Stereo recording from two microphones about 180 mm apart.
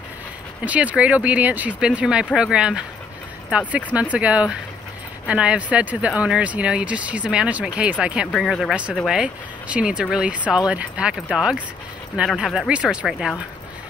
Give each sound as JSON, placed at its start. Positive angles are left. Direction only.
{"t": 0.7, "sound": "speech", "side_deg": -10}